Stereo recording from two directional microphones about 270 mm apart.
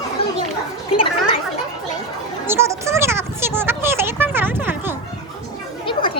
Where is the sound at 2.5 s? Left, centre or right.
Centre.